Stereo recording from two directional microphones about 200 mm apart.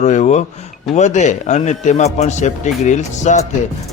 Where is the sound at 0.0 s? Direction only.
35° left (ahead or behind).